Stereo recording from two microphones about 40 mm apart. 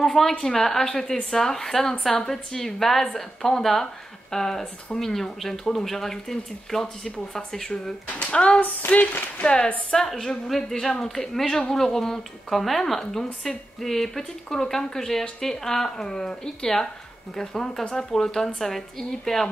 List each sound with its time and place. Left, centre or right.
0.0 s a woman's voice: centre
8.2 s speech: left
8.8 s a sound: left
9.8 s a woman's voice: centre